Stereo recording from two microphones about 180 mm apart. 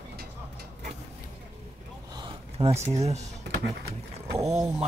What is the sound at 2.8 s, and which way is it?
Speech, 35° right (ahead or behind).